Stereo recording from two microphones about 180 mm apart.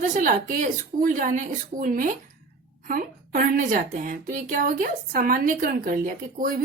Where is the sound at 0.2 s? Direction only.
50° right (ahead or behind).